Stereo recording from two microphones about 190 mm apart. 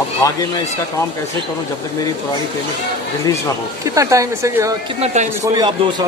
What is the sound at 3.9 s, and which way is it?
Speech, 15° right (ahead or behind).